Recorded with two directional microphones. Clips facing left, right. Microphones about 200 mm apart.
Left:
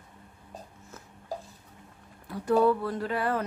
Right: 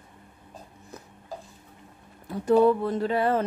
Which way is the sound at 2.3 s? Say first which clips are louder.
Right 4 dB; 25° right (ahead or behind).